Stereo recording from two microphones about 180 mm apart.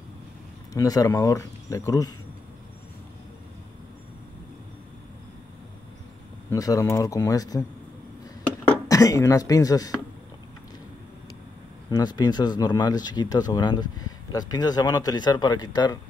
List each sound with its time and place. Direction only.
0.7 s speech: 20° left (ahead or behind)
6.5 s speech: 20° left (ahead or behind)
8.6 s speech: 20° left (ahead or behind)
11.9 s speech: 20° left (ahead or behind)